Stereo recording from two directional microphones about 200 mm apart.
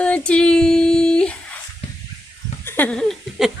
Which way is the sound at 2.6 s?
10° left (ahead or behind).